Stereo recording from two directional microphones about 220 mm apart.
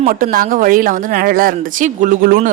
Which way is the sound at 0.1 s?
40° right (ahead or behind).